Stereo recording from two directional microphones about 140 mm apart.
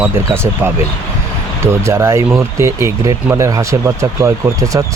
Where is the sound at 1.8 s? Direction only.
20° right (ahead or behind).